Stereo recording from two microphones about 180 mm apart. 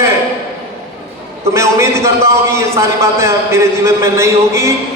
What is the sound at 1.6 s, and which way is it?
A man's voice, 15° right (ahead or behind).